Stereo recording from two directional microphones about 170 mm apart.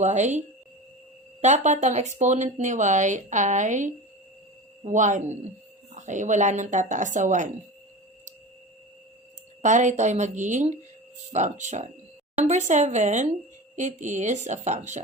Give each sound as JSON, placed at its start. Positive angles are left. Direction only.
{"t": 0.0, "sound": "speech", "side_deg": -45}
{"t": 9.6, "sound": "speech", "side_deg": -45}